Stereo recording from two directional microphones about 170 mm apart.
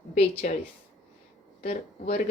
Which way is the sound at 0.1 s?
40° left (ahead or behind).